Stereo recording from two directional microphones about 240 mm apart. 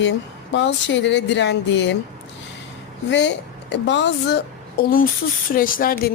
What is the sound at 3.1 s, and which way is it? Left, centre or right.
A woman's voice, left.